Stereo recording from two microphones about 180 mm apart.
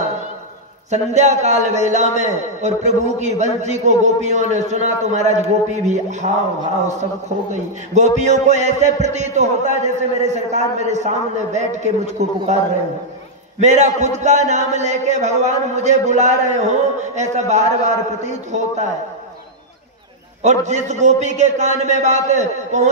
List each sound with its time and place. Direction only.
0.8 s a man's voice: 40° right (ahead or behind)
7.9 s a man's voice: 40° right (ahead or behind)
13.6 s a man's voice: 40° right (ahead or behind)
20.4 s a man's voice: 40° right (ahead or behind)